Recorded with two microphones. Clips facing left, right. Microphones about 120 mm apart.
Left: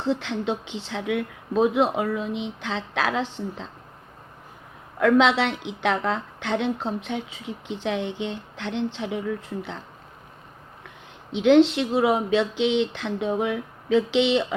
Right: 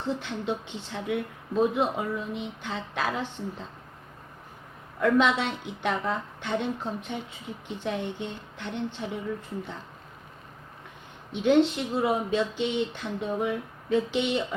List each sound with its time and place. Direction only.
0.0 s a woman's voice: 90° left
4.9 s a woman's voice: 90° left
11.3 s a woman's voice: 90° left